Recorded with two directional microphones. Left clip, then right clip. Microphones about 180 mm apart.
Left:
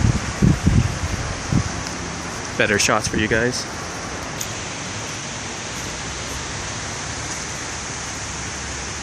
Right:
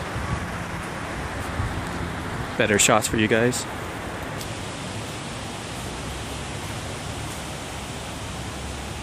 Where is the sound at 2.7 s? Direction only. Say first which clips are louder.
Left 1 dB; 15° right (ahead or behind).